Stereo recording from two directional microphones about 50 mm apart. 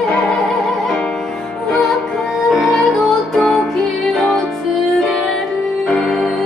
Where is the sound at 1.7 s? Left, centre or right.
Centre.